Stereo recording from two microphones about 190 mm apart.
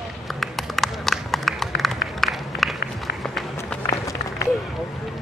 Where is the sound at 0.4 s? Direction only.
Centre (ahead or behind).